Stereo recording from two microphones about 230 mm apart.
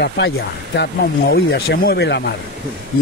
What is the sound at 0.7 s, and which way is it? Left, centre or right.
Speech, left.